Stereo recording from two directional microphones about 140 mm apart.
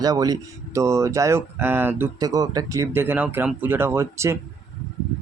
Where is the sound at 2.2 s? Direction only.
25° right (ahead or behind).